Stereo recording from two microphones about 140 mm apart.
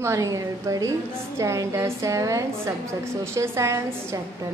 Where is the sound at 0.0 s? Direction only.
20° right (ahead or behind).